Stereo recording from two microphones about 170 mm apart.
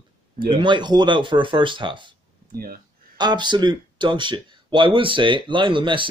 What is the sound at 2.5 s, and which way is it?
Speech, 60° right (ahead or behind).